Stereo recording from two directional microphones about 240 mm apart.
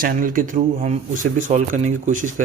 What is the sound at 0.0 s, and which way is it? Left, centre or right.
Speech, right.